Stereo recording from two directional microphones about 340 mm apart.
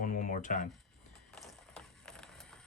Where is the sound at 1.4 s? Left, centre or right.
Centre.